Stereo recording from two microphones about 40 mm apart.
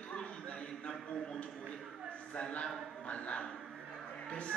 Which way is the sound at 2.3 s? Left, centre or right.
Left.